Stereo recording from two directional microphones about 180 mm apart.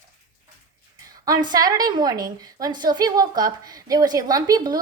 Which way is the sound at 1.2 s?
20° right (ahead or behind).